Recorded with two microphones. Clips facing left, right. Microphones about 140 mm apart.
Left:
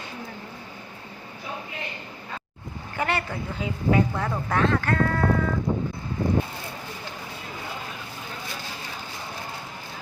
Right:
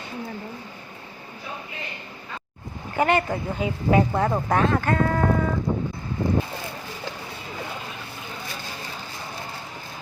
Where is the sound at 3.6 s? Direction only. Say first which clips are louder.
Right 3 dB; 15° right (ahead or behind).